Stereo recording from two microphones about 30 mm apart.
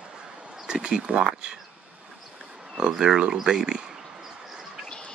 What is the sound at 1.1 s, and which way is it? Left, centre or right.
Speech, right.